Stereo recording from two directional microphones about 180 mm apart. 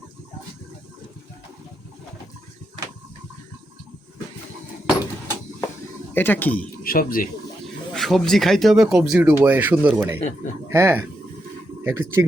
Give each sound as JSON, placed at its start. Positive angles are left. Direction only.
{"t": 6.1, "sound": "speech", "side_deg": 10}
{"t": 6.8, "sound": "speech", "side_deg": 55}
{"t": 7.9, "sound": "speech", "side_deg": 0}
{"t": 10.2, "sound": "speech", "side_deg": 40}
{"t": 10.7, "sound": "speech", "side_deg": -15}